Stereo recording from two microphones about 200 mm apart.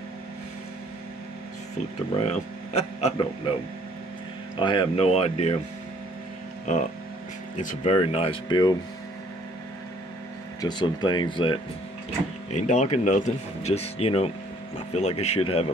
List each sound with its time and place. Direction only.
2.1 s speech: 30° left (ahead or behind)
4.6 s speech: 25° left (ahead or behind)
7.5 s speech: 35° left (ahead or behind)
10.6 s speech: 20° left (ahead or behind)
12.4 s speech: 35° left (ahead or behind)